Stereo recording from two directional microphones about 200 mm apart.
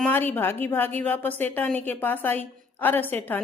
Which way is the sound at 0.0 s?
10° left (ahead or behind).